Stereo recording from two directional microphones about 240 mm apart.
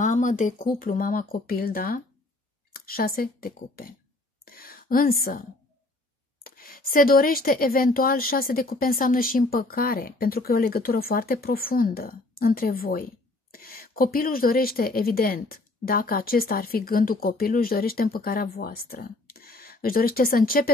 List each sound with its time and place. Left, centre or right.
0.0 s speech: left
6.4 s speech: left